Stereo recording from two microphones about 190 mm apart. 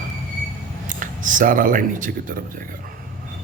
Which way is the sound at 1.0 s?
45° right (ahead or behind).